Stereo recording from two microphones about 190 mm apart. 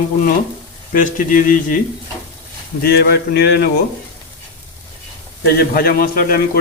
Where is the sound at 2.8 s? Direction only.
55° left (ahead or behind).